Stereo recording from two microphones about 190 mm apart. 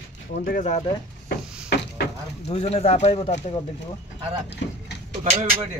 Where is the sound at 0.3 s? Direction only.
45° left (ahead or behind).